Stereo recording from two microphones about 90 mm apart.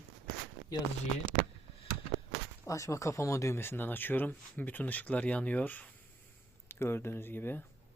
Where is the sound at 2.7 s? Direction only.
35° left (ahead or behind).